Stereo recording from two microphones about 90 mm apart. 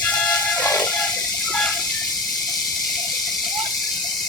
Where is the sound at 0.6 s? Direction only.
20° left (ahead or behind).